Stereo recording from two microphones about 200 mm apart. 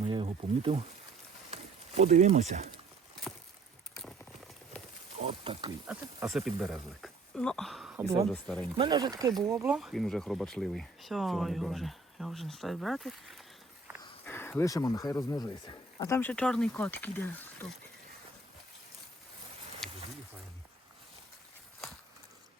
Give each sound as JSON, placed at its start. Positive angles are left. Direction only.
{"t": 0.0, "sound": "a sound", "side_deg": -25}
{"t": 2.0, "sound": "speech", "side_deg": -35}
{"t": 5.2, "sound": "speech", "side_deg": -25}
{"t": 5.9, "sound": "speech", "side_deg": -15}
{"t": 6.3, "sound": "speech", "side_deg": 0}
{"t": 8.5, "sound": "speech", "side_deg": -20}
{"t": 9.7, "sound": "speech", "side_deg": 0}
{"t": 19.8, "sound": "a sound", "side_deg": 0}